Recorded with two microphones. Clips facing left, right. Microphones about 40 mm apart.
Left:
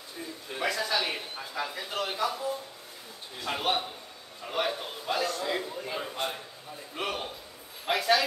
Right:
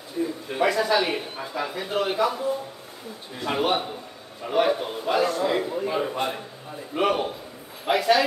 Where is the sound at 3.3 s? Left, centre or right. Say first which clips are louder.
Right 6 dB; centre.